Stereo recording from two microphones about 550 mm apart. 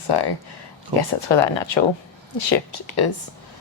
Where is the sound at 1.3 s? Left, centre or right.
Left.